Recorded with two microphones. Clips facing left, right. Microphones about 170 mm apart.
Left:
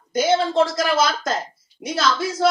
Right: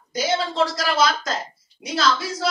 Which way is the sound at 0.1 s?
50° left (ahead or behind).